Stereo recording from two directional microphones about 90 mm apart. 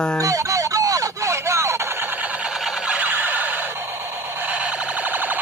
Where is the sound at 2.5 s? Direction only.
5° right (ahead or behind).